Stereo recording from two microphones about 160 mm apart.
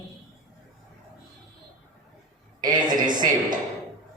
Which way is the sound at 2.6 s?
25° right (ahead or behind).